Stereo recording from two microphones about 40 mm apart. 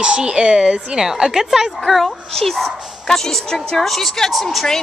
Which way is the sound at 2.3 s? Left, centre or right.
Centre.